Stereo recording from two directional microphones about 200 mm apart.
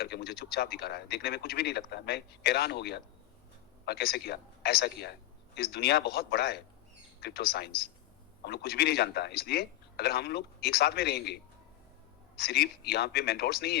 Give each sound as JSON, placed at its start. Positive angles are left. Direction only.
{"t": 0.0, "sound": "speech", "side_deg": 50}
{"t": 12.4, "sound": "speech", "side_deg": 55}